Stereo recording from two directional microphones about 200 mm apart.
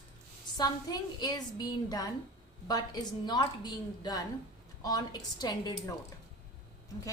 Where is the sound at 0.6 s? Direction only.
20° left (ahead or behind).